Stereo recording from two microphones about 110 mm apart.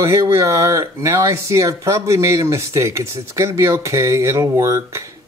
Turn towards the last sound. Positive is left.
turn(degrees=-25)  # may be behind; listen again after turning